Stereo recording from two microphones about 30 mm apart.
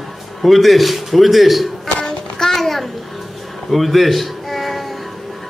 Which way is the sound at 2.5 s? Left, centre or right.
Centre.